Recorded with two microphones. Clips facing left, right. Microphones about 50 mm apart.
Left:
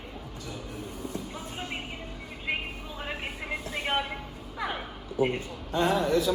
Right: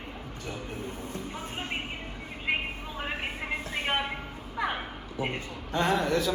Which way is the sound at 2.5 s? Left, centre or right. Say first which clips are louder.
Right 2 dB; right.